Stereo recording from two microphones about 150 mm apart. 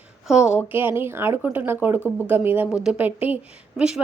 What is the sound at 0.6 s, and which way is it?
A woman's voice, 15° right (ahead or behind).